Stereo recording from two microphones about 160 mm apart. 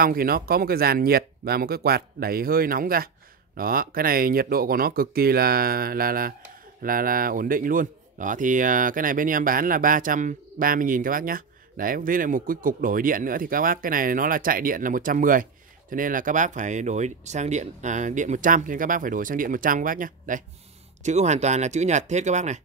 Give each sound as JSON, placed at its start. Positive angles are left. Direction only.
{"t": 0.0, "sound": "a man's voice", "side_deg": -65}
{"t": 21.0, "sound": "speech", "side_deg": -45}